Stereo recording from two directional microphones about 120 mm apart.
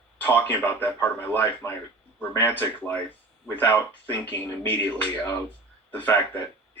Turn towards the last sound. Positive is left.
turn(degrees=15)  # may be behind; listen again after turning